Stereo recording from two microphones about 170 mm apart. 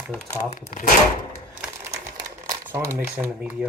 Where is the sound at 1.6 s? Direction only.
15° right (ahead or behind).